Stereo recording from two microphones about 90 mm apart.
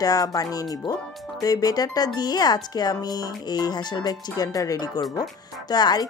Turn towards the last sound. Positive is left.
turn(degrees=50)  # may be behind; listen again after turning